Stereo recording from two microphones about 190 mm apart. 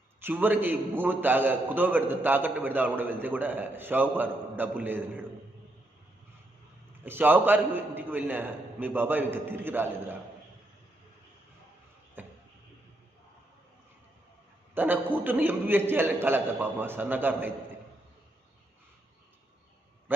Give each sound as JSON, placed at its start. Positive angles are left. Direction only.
{"t": 0.2, "sound": "a man's voice", "side_deg": -10}
{"t": 7.0, "sound": "a man's voice", "side_deg": -10}
{"t": 12.2, "sound": "a sound", "side_deg": -10}
{"t": 14.8, "sound": "a man's voice", "side_deg": -10}
{"t": 20.1, "sound": "a man's voice", "side_deg": -10}